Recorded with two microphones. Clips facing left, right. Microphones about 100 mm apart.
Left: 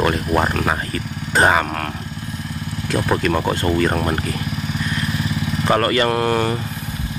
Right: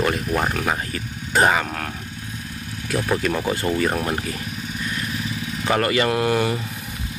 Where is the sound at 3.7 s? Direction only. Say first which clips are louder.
Left 4 dB; centre (ahead or behind).